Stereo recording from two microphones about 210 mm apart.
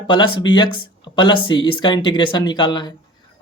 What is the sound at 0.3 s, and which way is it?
Speech, 20° left (ahead or behind).